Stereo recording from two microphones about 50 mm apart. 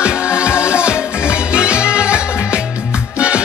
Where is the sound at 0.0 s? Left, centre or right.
Right.